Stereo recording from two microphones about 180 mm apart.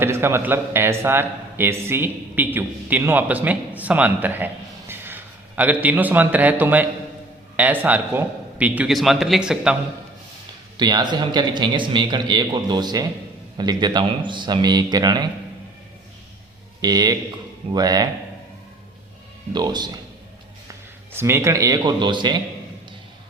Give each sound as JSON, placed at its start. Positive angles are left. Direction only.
{"t": 0.0, "sound": "a man's voice", "side_deg": -15}
{"t": 10.8, "sound": "speech", "side_deg": -25}
{"t": 16.8, "sound": "speech", "side_deg": -20}
{"t": 19.5, "sound": "a man's voice", "side_deg": -25}